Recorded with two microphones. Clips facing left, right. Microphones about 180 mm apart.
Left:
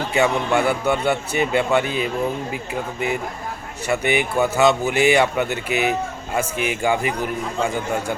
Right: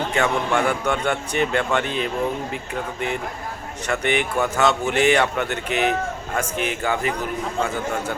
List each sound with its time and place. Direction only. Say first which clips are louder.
0.1 s speech: left 5 dB; 10° left (ahead or behind)
3.8 s speech: left 2 dB; 10° left (ahead or behind)